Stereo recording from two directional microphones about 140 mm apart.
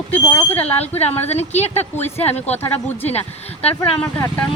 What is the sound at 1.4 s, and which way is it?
Speech, 50° left (ahead or behind).